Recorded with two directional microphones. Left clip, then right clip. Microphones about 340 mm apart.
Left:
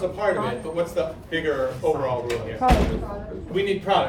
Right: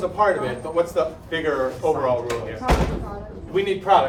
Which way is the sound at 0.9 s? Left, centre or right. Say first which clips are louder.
Right 2 dB; right.